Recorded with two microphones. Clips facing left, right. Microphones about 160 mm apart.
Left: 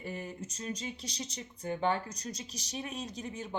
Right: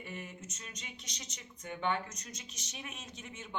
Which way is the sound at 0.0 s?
35° left (ahead or behind).